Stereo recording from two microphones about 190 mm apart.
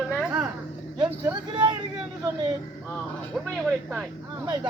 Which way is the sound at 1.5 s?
20° right (ahead or behind).